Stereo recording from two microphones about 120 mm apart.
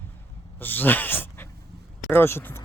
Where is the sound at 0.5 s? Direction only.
15° left (ahead or behind).